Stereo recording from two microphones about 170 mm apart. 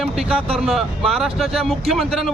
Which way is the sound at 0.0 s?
5° right (ahead or behind).